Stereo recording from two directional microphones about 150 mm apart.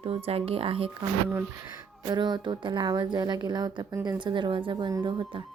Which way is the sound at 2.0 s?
30° right (ahead or behind).